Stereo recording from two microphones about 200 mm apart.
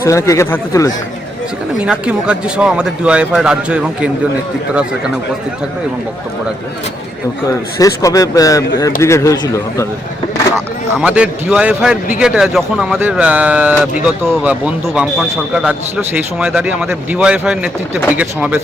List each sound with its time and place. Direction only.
0.0 s speech: 15° left (ahead or behind)
1.8 s speech: 5° right (ahead or behind)
7.8 s speech: 15° left (ahead or behind)
11.0 s speech: 5° right (ahead or behind)